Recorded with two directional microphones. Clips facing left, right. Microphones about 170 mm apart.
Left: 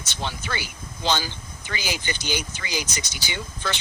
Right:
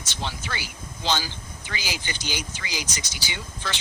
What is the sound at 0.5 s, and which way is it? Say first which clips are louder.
Speech: left 2 dB; 55° left (ahead or behind).